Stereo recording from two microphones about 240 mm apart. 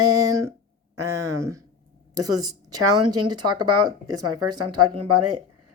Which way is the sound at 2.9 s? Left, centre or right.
Right.